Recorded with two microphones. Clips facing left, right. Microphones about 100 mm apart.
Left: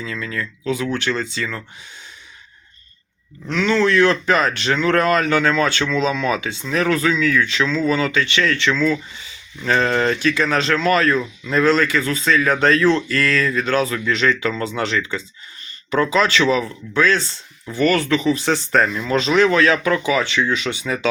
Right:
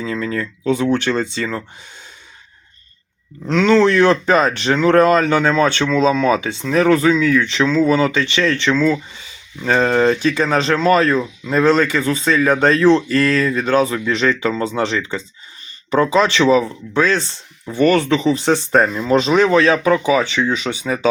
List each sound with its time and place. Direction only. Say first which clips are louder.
0.0 s speech: right 5 dB; 35° right (ahead or behind)
3.4 s speech: right 5 dB; 35° right (ahead or behind)
5.9 s speech: right 5 dB; 40° right (ahead or behind)
9.6 s speech: right 3 dB; 15° right (ahead or behind)
18.9 s speech: right 3 dB; 35° right (ahead or behind)
19.2 s speech: even; 25° right (ahead or behind)